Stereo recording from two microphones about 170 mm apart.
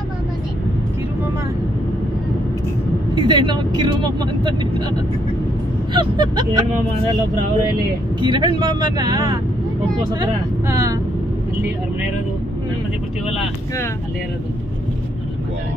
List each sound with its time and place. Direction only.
3.2 s speech: 25° right (ahead or behind)
5.9 s speech: 25° right (ahead or behind)
8.2 s speech: 25° right (ahead or behind)